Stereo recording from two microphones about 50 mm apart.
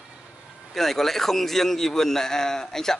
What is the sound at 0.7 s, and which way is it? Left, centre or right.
A man's voice, centre.